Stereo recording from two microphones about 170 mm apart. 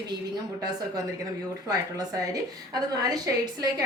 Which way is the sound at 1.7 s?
20° right (ahead or behind).